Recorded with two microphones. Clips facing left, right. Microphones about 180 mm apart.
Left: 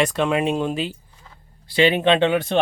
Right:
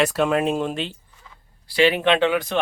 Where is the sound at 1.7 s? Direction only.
20° left (ahead or behind).